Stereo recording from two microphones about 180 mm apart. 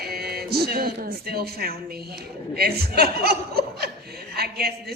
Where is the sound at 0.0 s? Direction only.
60° right (ahead or behind).